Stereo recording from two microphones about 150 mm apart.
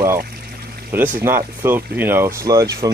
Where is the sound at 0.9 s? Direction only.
15° right (ahead or behind).